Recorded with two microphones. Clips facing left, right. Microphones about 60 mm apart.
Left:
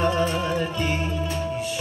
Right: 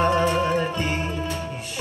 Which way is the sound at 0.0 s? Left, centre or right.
Right.